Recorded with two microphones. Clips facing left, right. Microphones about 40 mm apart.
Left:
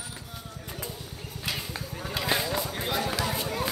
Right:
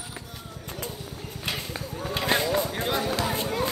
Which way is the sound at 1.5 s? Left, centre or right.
Right.